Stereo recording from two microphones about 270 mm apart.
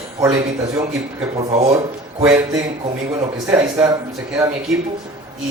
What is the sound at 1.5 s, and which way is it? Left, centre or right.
Speech, right.